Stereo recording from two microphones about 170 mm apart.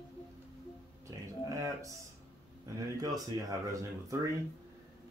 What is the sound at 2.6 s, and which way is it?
Speech, 20° right (ahead or behind).